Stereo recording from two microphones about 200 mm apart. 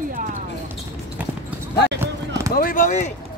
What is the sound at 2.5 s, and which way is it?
Speech, 45° left (ahead or behind).